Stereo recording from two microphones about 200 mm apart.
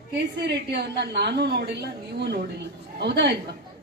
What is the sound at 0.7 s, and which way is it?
A woman's voice, 55° right (ahead or behind).